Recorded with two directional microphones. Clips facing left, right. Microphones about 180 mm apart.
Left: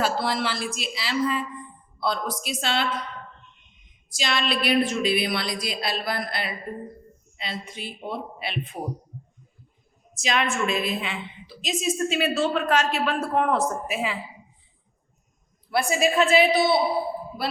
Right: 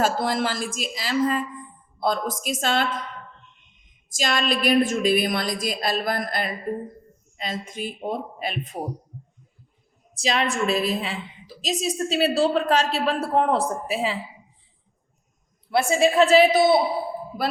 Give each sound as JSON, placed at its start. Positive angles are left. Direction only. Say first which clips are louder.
{"t": 0.0, "sound": "a woman's voice", "louder": "right 2 dB", "side_deg": -45}
{"t": 4.1, "sound": "a woman's voice", "louder": "right 2 dB", "side_deg": -45}
{"t": 10.2, "sound": "a woman's voice", "louder": "right 1 dB", "side_deg": -35}
{"t": 15.7, "sound": "a woman's voice", "louder": "right 3 dB", "side_deg": -25}